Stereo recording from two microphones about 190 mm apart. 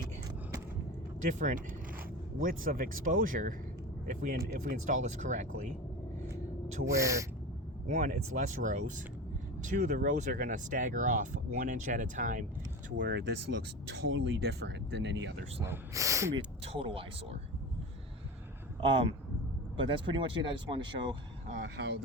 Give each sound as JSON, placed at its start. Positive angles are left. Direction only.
{"t": 1.2, "sound": "speech", "side_deg": -40}
{"t": 6.8, "sound": "speech", "side_deg": -15}
{"t": 7.9, "sound": "speech", "side_deg": -45}
{"t": 13.0, "sound": "speech", "side_deg": -65}
{"t": 15.6, "sound": "speech", "side_deg": -15}
{"t": 16.6, "sound": "speech", "side_deg": -30}
{"t": 18.8, "sound": "speech", "side_deg": -25}
{"t": 21.6, "sound": "speech", "side_deg": -65}